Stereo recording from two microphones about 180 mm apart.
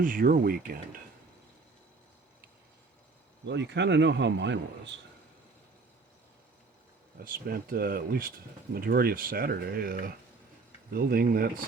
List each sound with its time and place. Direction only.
0.0 s speech: 50° right (ahead or behind)
3.4 s a man's voice: 75° right (ahead or behind)
7.3 s speech: 55° right (ahead or behind)